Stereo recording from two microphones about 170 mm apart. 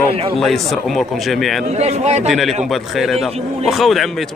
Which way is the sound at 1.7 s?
40° right (ahead or behind).